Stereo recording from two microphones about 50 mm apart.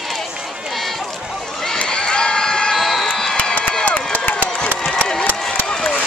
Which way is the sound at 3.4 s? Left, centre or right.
Left.